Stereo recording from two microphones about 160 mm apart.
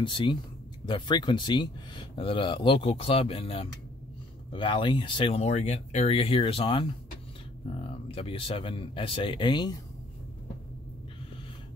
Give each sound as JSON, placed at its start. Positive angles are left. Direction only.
{"t": 0.0, "sound": "speech", "side_deg": 30}